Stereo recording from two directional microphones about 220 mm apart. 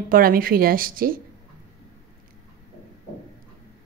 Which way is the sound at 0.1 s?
40° right (ahead or behind).